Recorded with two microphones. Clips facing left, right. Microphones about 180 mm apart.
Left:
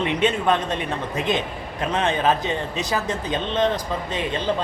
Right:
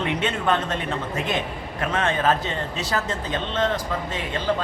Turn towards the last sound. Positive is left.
turn(degrees=15)  # may be behind; listen again after turning